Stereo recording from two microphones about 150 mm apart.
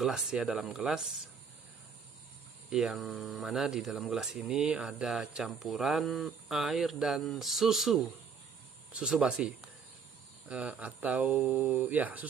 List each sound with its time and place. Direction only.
0.0 s speech: 5° right (ahead or behind)
2.7 s speech: 5° right (ahead or behind)